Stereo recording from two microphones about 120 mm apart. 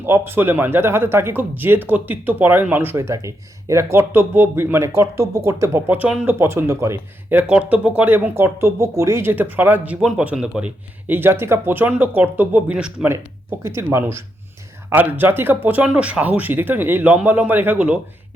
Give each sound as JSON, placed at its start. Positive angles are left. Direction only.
{"t": 0.0, "sound": "speech", "side_deg": -15}
{"t": 11.1, "sound": "speech", "side_deg": -20}
{"t": 13.1, "sound": "speech", "side_deg": -25}